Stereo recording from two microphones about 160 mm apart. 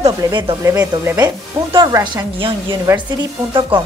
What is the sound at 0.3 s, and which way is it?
A woman's voice, 25° right (ahead or behind).